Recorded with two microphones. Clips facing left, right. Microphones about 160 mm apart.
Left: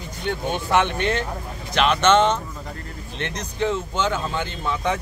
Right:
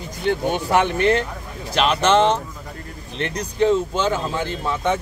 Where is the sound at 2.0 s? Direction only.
35° right (ahead or behind).